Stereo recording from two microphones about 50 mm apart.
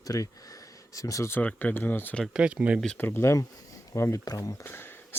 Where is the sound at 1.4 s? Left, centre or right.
Left.